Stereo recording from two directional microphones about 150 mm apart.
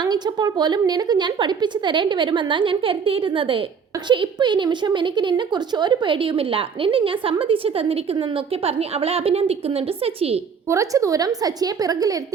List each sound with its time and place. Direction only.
0.0 s a woman's voice: 25° right (ahead or behind)
10.7 s a woman's voice: 20° right (ahead or behind)